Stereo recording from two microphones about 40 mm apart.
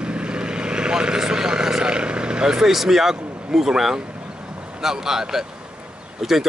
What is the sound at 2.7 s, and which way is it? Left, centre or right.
A man's voice, centre.